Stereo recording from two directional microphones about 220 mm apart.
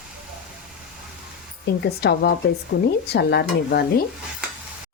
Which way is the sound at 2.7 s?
50° left (ahead or behind).